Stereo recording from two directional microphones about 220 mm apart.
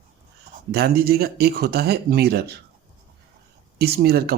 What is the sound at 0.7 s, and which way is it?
Speech, 45° right (ahead or behind).